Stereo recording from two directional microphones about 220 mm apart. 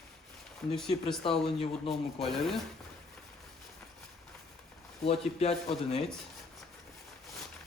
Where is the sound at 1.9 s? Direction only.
Centre (ahead or behind).